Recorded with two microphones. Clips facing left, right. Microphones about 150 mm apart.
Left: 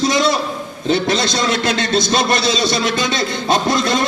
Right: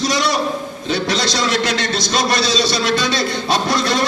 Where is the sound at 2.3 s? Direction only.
50° left (ahead or behind).